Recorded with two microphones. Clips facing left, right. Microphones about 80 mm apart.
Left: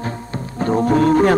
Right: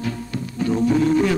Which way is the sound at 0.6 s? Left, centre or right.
Left.